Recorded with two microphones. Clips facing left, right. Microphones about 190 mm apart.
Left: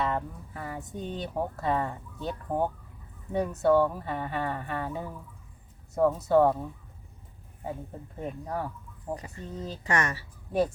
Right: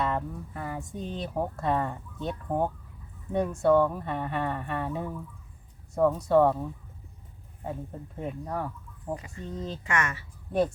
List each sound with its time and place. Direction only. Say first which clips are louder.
0.0 s speech: right 1 dB; centre (ahead or behind)
8.2 s speech: right 1 dB; centre (ahead or behind)
9.8 s speech: left 3 dB; 35° left (ahead or behind)